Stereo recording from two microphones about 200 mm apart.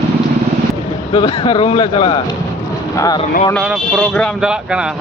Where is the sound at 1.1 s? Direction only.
25° left (ahead or behind).